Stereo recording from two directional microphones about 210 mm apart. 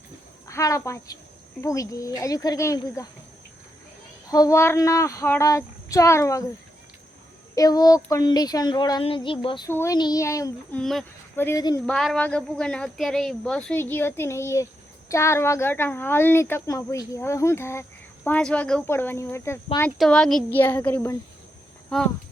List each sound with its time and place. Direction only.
0.4 s speech: 15° left (ahead or behind)
4.3 s speech: 15° left (ahead or behind)
7.5 s speech: 15° left (ahead or behind)
9.6 s speech: 15° left (ahead or behind)
11.9 s speech: 5° left (ahead or behind)